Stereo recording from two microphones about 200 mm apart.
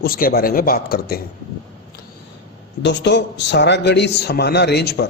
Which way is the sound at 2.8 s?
60° left (ahead or behind).